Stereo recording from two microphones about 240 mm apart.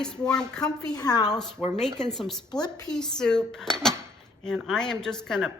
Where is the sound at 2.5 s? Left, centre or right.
Centre.